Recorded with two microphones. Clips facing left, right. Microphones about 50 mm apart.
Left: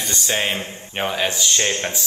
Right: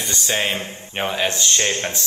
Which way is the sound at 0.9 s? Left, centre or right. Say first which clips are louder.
Even; centre.